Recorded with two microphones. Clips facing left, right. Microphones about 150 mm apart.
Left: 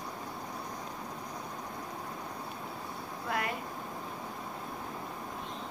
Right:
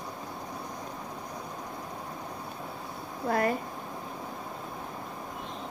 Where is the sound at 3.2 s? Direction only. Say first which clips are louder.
Right 8 dB; 40° right (ahead or behind).